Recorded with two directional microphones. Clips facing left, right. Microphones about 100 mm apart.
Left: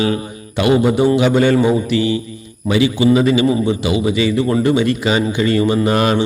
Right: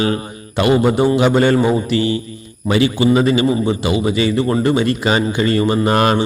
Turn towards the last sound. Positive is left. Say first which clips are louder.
# even
turn(degrees=-45)  # may be behind; listen again after turning